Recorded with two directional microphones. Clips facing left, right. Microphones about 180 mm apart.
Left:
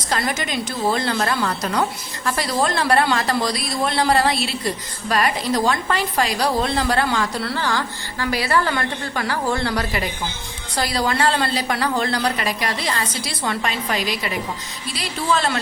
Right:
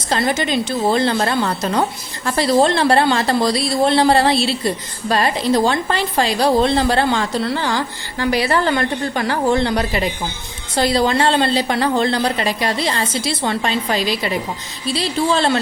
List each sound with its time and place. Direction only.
0.1 s a woman's voice: 30° right (ahead or behind)